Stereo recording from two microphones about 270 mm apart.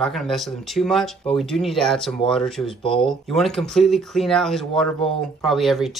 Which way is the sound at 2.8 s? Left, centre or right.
Centre.